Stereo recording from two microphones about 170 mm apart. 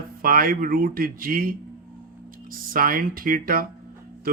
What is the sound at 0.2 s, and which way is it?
Speech, 55° right (ahead or behind).